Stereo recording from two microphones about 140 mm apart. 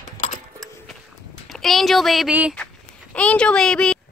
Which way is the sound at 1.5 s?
Centre (ahead or behind).